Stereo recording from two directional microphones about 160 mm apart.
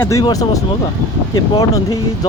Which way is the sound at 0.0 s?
20° left (ahead or behind).